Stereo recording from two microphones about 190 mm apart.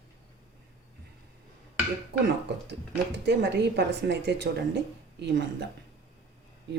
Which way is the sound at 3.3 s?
65° right (ahead or behind).